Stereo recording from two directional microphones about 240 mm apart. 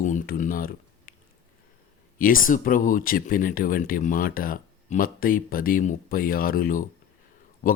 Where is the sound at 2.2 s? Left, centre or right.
Left.